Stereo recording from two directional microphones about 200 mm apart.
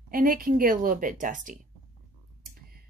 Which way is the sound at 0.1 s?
45° right (ahead or behind).